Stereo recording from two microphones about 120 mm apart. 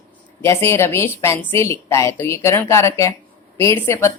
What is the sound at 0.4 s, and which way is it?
Speech, 20° left (ahead or behind).